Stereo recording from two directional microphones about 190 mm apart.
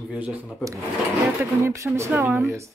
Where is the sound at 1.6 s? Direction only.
15° right (ahead or behind).